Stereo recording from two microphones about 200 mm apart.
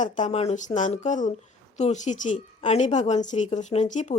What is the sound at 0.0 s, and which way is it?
A woman's voice, 35° left (ahead or behind).